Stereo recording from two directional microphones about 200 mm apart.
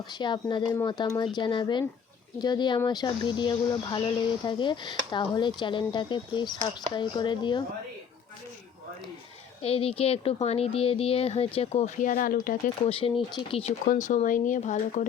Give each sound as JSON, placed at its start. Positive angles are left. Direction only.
{"t": 0.1, "sound": "speech", "side_deg": 20}
{"t": 9.6, "sound": "speech", "side_deg": 30}
{"t": 12.8, "sound": "speech", "side_deg": 30}
{"t": 13.8, "sound": "speech", "side_deg": 40}